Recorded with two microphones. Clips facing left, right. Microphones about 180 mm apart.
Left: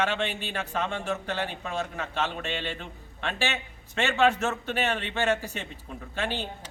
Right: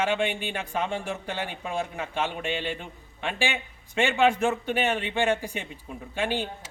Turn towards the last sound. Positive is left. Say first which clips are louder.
# right 3 dB
turn(degrees=-10)  # may be behind; listen again after turning